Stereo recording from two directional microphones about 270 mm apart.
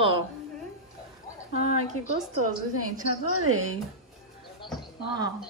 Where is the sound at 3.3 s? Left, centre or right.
Right.